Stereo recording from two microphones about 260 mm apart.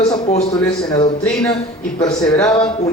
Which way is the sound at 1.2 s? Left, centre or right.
Centre.